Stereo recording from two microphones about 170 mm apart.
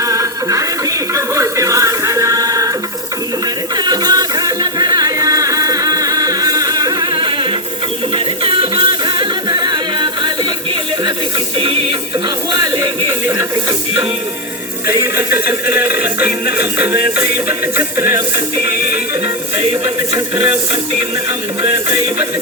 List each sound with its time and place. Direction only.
0.0 s music: 20° right (ahead or behind)
3.8 s music: 25° right (ahead or behind)
11.5 s music: 35° right (ahead or behind)
14.8 s music: 15° right (ahead or behind)
19.8 s speech: 20° right (ahead or behind)
21.6 s speech: 30° right (ahead or behind)